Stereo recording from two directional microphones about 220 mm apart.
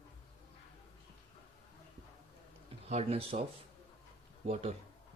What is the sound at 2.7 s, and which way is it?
Speech, 30° right (ahead or behind).